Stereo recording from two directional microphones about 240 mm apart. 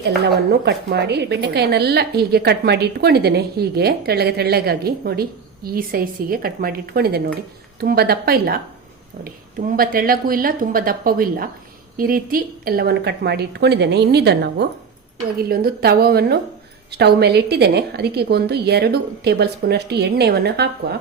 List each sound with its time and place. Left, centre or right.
0.6 s a woman's voice: right